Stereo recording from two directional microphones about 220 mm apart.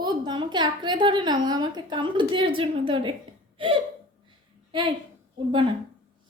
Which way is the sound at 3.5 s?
25° right (ahead or behind).